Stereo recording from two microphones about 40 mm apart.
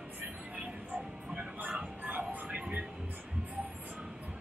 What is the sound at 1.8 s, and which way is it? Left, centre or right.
Music, right.